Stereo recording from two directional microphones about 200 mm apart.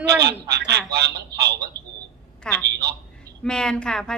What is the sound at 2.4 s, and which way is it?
A woman's voice, 10° left (ahead or behind).